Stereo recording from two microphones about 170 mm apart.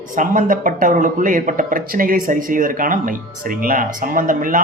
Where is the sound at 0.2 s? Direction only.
50° right (ahead or behind).